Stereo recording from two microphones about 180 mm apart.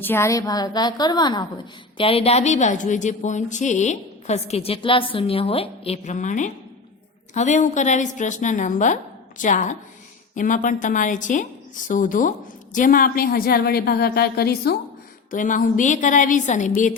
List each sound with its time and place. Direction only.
0.0 s a woman's voice: 15° left (ahead or behind); by 14.8 s 60° left (ahead or behind)
15.3 s a woman's voice: 45° left (ahead or behind)